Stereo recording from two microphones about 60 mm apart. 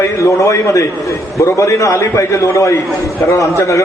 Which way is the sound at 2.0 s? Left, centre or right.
Left.